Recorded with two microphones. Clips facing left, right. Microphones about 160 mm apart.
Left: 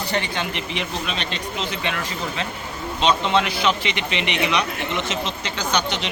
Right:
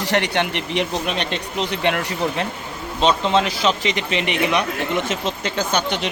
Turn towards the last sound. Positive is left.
turn(degrees=-50)  # may be behind; listen again after turning